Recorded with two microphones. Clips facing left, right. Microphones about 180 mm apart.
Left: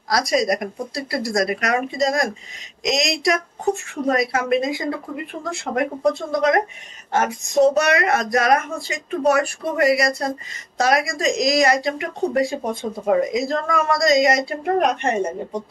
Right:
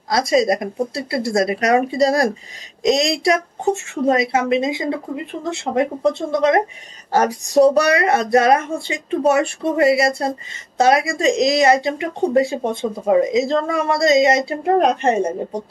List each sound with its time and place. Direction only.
0.1 s speech: 25° right (ahead or behind)